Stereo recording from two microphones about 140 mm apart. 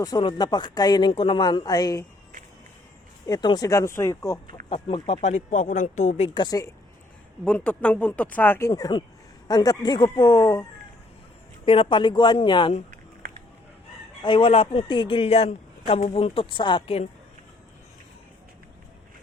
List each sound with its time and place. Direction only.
0.0 s a man's voice: 30° left (ahead or behind)
3.2 s speech: 30° left (ahead or behind)
4.7 s speech: 45° left (ahead or behind)
6.4 s speech: 25° left (ahead or behind)
7.4 s speech: 10° left (ahead or behind)
11.6 s a man's voice: 40° left (ahead or behind)
14.2 s a man's voice: 35° left (ahead or behind)